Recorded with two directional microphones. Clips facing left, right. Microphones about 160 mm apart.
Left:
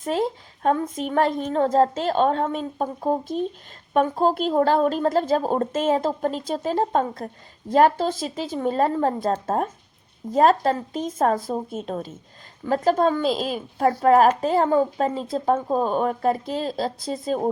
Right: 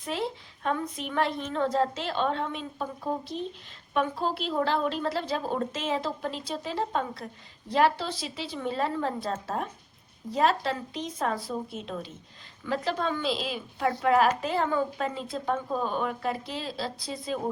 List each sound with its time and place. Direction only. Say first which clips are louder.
0.0 s a woman's voice: left 8 dB; 45° left (ahead or behind)